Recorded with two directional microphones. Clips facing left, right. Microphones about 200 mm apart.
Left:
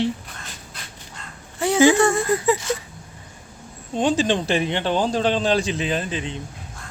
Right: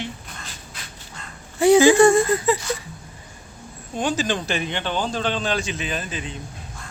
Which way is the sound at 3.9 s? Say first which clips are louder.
Left 4 dB; 25° left (ahead or behind).